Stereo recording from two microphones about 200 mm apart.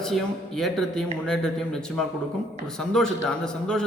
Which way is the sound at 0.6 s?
Centre (ahead or behind).